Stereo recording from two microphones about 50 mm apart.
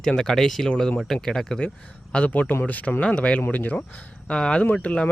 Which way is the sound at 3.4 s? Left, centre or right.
Left.